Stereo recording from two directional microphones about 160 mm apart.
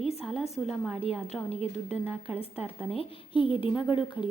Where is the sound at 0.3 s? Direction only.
40° left (ahead or behind).